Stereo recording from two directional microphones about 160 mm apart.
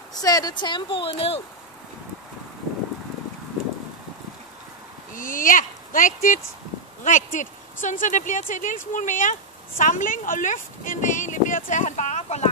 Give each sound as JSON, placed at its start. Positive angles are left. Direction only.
{"t": 0.1, "sound": "speech", "side_deg": 25}
{"t": 5.1, "sound": "speech", "side_deg": 55}